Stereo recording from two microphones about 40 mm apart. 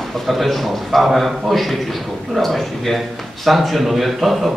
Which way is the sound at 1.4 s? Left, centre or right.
Centre.